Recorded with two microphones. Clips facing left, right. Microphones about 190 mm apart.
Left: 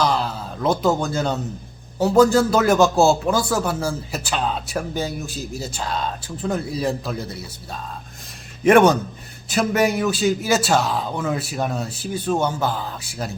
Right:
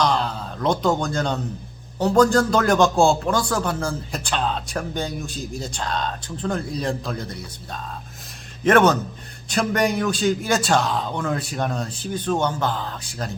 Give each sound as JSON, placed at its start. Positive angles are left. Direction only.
{"t": 0.0, "sound": "a man's voice", "side_deg": 5}